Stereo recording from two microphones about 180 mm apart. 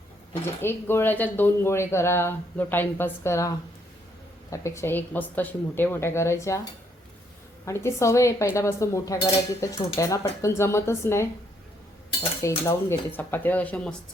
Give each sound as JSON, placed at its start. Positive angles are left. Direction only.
{"t": 0.6, "sound": "speech", "side_deg": 10}
{"t": 4.5, "sound": "speech", "side_deg": 15}
{"t": 7.6, "sound": "speech", "side_deg": 15}
{"t": 12.4, "sound": "speech", "side_deg": 15}